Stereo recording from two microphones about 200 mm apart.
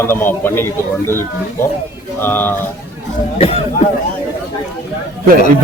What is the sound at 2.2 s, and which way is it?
Speech, 10° left (ahead or behind).